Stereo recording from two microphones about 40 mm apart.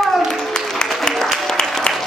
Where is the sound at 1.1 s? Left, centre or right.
Left.